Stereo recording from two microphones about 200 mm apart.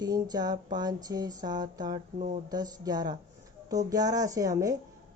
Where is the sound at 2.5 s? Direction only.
20° right (ahead or behind).